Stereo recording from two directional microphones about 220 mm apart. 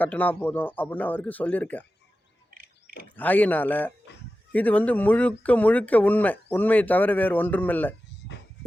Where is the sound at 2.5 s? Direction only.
40° right (ahead or behind).